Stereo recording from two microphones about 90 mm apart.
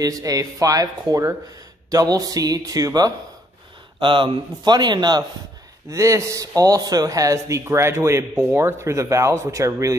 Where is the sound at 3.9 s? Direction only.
65° right (ahead or behind).